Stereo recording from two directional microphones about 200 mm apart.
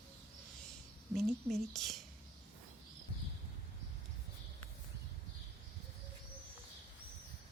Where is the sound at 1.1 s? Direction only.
Centre (ahead or behind).